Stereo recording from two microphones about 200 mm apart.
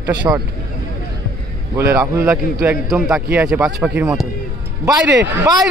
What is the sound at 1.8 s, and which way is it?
A man's voice, 10° right (ahead or behind).